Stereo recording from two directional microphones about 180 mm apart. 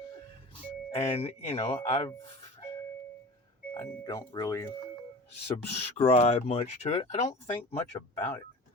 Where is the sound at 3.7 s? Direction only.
20° left (ahead or behind).